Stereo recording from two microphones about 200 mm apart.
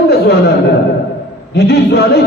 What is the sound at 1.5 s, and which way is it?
Speech, 55° left (ahead or behind).